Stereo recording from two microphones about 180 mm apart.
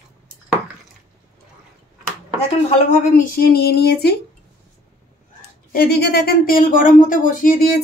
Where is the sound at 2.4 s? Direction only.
45° left (ahead or behind); by 4.1 s 60° left (ahead or behind).